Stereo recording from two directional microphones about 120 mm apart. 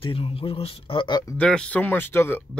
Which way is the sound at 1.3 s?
5° left (ahead or behind).